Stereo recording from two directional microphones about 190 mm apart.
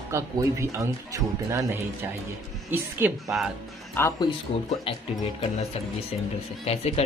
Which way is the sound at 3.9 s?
20° left (ahead or behind).